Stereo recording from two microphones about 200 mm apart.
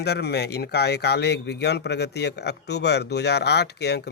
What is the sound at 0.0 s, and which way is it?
Speech, 55° left (ahead or behind).